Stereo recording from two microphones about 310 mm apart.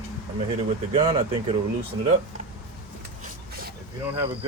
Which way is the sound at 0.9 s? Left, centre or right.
Centre.